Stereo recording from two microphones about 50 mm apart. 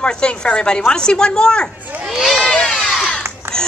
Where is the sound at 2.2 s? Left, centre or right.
Centre.